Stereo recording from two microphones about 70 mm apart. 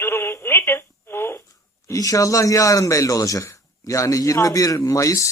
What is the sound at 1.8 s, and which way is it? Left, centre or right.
Speech, left.